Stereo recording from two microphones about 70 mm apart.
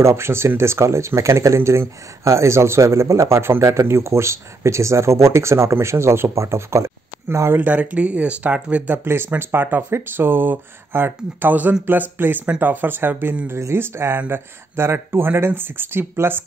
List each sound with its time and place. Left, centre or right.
0.0 s speech: right
7.6 s speech: right
13.5 s speech: right